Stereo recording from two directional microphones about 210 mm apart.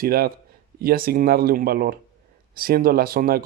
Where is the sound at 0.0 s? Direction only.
45° right (ahead or behind).